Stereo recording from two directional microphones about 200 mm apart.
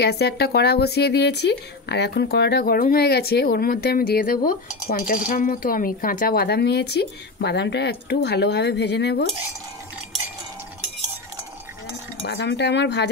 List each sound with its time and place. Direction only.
0.0 s speech: 55° left (ahead or behind)
4.5 s cutlery: 45° left (ahead or behind)
12.2 s cutlery: 60° left (ahead or behind)